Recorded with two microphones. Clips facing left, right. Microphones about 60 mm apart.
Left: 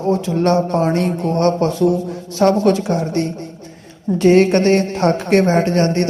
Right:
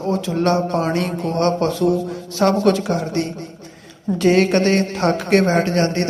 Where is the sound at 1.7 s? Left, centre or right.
Left.